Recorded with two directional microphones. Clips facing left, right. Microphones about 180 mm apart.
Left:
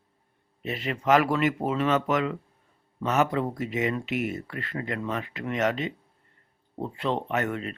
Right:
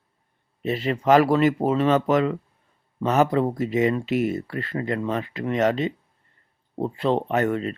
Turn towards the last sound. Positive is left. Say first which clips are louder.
# right 6 dB
turn(degrees=-35)  # may be behind; listen again after turning